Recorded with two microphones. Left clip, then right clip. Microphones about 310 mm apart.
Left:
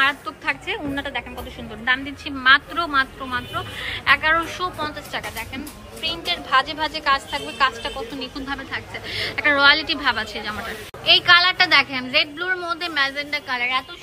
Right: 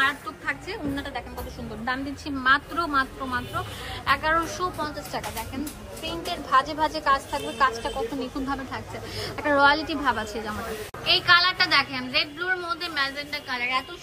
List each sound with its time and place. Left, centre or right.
0.0 s music: centre
1.9 s a woman's voice: centre